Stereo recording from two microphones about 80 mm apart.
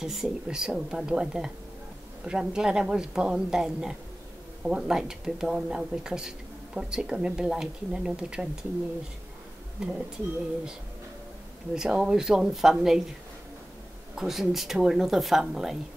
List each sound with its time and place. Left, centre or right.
0.0 s speech: centre
9.8 s speech: centre
11.7 s speech: centre
14.1 s speech: centre